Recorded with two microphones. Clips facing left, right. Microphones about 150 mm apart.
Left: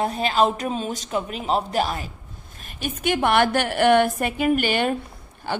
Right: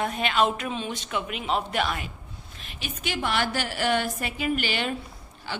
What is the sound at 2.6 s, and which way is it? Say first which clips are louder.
A woman's voice: left 7 dB; 45° left (ahead or behind).